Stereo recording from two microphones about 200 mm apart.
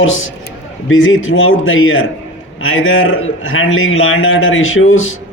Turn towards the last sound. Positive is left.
turn(degrees=85)